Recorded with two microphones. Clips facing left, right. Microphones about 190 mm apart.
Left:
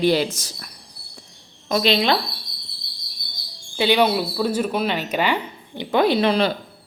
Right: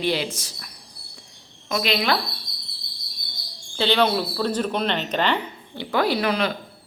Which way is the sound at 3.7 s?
10° left (ahead or behind).